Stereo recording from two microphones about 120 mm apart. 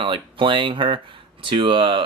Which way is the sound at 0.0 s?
45° right (ahead or behind).